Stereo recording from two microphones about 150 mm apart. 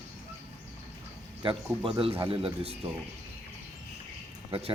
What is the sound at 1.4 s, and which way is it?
Speech, 35° right (ahead or behind).